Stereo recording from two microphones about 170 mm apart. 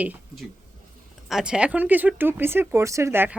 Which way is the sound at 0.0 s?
10° right (ahead or behind).